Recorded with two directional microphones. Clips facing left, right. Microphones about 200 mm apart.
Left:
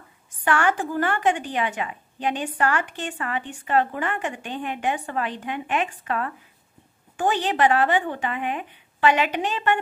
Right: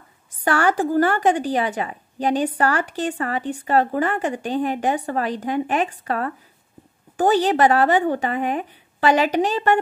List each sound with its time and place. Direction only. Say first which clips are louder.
0.4 s a woman's voice: right 3 dB; 35° right (ahead or behind)